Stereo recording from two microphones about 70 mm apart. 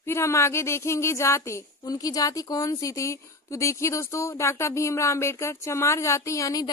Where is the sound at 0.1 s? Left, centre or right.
Left.